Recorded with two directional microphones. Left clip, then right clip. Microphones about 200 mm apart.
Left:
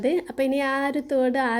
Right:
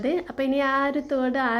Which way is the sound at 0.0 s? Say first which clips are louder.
Left 2 dB; 35° left (ahead or behind).